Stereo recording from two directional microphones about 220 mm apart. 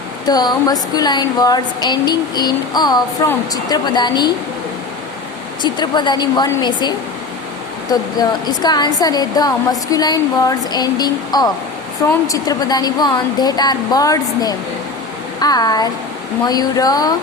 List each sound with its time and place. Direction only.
0.3 s speech: 20° left (ahead or behind)
5.6 s speech: 20° left (ahead or behind)
8.2 s speech: 20° left (ahead or behind)